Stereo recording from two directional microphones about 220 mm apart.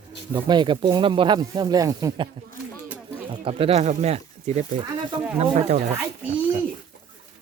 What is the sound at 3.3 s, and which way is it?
Speech, 25° right (ahead or behind).